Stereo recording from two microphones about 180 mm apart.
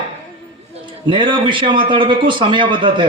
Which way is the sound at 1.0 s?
25° right (ahead or behind).